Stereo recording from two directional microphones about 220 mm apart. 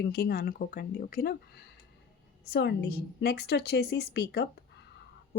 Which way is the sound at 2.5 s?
50° left (ahead or behind).